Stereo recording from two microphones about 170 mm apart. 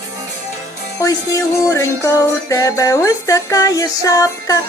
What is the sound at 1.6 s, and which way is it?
Music, 15° left (ahead or behind).